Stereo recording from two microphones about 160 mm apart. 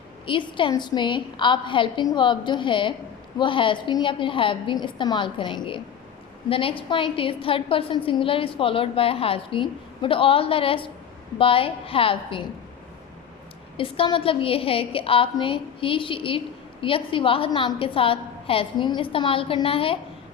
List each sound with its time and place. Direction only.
0.3 s a woman's voice: 30° left (ahead or behind)
13.7 s a woman's voice: 35° left (ahead or behind)